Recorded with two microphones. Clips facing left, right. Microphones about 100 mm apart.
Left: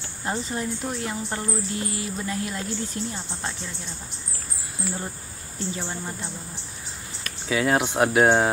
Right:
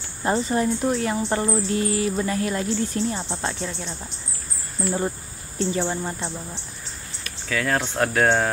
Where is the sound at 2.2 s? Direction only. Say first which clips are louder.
Right 5 dB; 60° right (ahead or behind).